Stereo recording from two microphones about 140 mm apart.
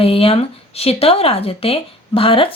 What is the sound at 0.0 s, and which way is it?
Speech, 40° left (ahead or behind).